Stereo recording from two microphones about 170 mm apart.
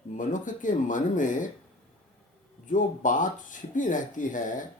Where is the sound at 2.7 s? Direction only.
50° left (ahead or behind).